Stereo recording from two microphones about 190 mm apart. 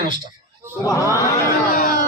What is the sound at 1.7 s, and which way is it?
Speech, 45° left (ahead or behind).